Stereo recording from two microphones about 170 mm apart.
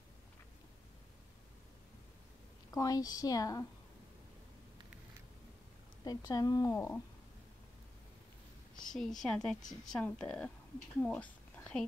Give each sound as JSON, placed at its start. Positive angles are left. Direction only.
{"t": 2.7, "sound": "speech", "side_deg": 20}
{"t": 6.0, "sound": "speech", "side_deg": 20}
{"t": 8.9, "sound": "a woman's voice", "side_deg": 0}
{"t": 11.0, "sound": "a sound", "side_deg": 10}